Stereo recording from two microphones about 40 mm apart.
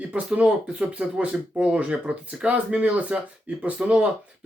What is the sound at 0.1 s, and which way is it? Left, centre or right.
Speech, right.